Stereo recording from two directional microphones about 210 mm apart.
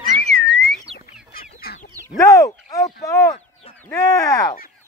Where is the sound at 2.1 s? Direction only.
15° left (ahead or behind).